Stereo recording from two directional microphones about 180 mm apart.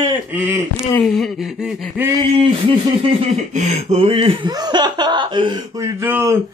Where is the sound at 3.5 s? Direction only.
35° right (ahead or behind); by 6.4 s 15° right (ahead or behind).